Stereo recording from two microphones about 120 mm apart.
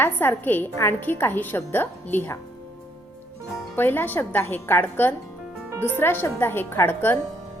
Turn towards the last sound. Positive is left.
turn(degrees=15)  # may be behind; listen again after turning